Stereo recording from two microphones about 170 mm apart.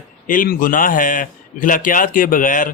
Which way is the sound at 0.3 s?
50° left (ahead or behind).